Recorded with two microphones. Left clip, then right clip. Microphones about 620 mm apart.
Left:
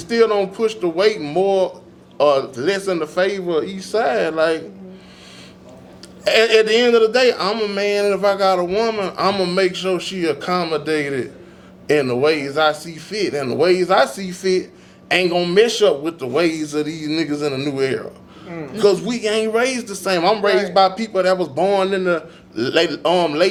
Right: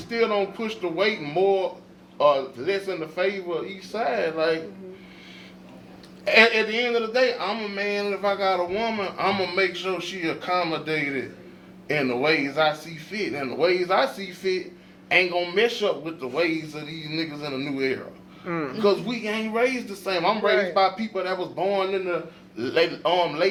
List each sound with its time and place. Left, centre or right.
0.1 s a man's voice: left
6.2 s a man's voice: left